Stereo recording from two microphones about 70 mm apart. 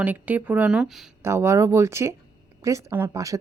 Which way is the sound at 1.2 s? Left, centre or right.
Right.